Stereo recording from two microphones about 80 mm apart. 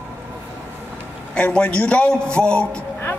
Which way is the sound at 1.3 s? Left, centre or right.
Centre.